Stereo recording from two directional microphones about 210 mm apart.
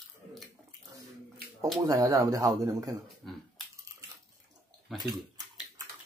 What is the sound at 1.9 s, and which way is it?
A man's voice, 15° right (ahead or behind).